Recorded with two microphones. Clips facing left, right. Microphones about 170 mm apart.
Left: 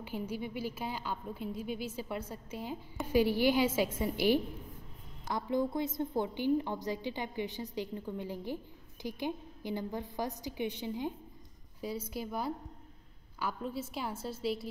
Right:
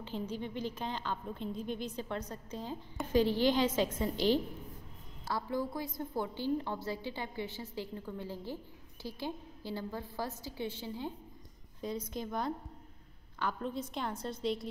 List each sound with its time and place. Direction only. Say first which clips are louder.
0.0 s a woman's voice: left 1 dB; 10° left (ahead or behind)